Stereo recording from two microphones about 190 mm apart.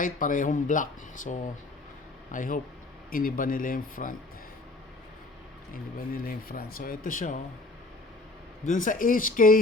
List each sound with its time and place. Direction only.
0.0 s speech: 45° left (ahead or behind)
6.2 s speech: 50° left (ahead or behind)
8.6 s speech: 40° left (ahead or behind)